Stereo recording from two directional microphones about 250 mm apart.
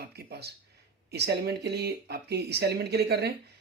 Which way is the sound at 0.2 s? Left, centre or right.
Right.